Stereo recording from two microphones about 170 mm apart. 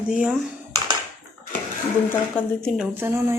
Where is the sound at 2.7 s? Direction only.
10° right (ahead or behind).